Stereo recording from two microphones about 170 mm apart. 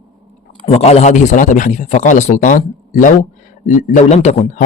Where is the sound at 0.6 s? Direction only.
40° left (ahead or behind).